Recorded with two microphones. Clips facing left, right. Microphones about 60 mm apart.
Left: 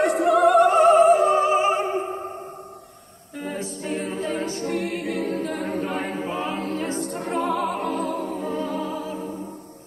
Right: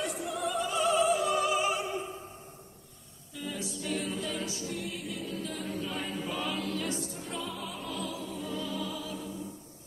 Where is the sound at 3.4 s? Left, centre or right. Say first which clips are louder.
Left 7 dB; left.